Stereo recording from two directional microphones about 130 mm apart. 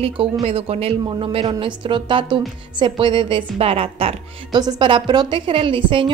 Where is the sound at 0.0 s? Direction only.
45° right (ahead or behind).